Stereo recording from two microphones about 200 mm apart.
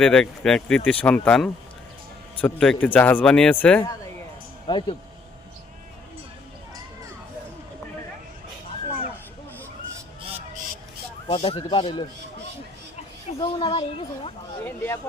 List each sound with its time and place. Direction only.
0.0 s a man's voice: 5° left (ahead or behind)
4.6 s speech: 25° left (ahead or behind)
11.3 s speech: 30° left (ahead or behind)
13.2 s speech: 25° left (ahead or behind)
14.6 s a man's voice: 10° left (ahead or behind)